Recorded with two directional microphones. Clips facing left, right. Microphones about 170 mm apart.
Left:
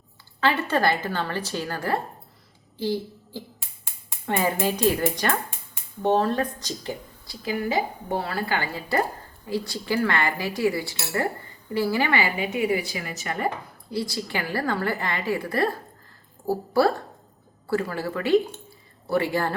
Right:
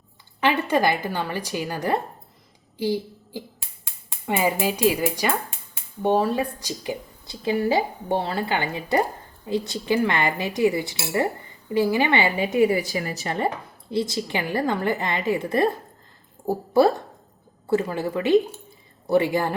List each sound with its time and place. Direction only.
0.3 s a woman's voice: 15° right (ahead or behind)
7.4 s a woman's voice: 30° right (ahead or behind)